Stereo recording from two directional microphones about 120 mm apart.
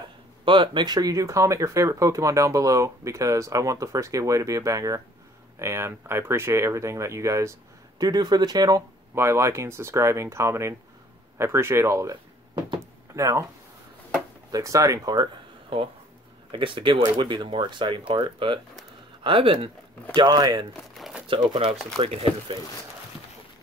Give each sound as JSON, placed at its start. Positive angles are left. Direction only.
{"t": 0.5, "sound": "speech", "side_deg": -40}
{"t": 9.1, "sound": "speech", "side_deg": -20}
{"t": 14.5, "sound": "speech", "side_deg": -25}
{"t": 16.5, "sound": "speech", "side_deg": -45}
{"t": 20.2, "sound": "speech", "side_deg": -35}
{"t": 20.9, "sound": "crumpling", "side_deg": 0}
{"t": 21.5, "sound": "speech", "side_deg": -50}